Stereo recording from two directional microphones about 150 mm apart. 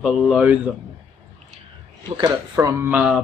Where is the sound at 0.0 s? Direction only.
5° right (ahead or behind).